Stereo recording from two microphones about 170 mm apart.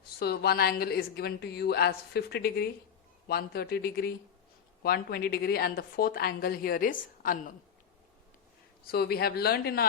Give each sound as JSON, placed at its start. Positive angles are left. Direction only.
{"t": 0.2, "sound": "a woman's voice", "side_deg": 70}
{"t": 8.9, "sound": "a woman's voice", "side_deg": 70}